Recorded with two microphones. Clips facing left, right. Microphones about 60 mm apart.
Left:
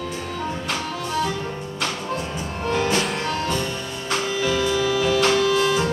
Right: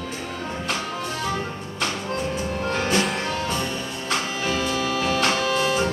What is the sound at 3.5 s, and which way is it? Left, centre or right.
Music, right.